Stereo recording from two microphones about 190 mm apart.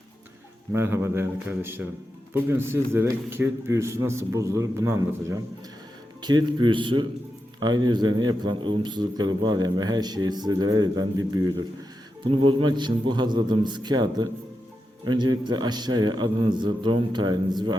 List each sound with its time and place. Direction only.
0.7 s a man's voice: 15° right (ahead or behind)